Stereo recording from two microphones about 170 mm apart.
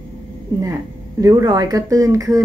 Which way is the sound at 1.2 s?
20° right (ahead or behind).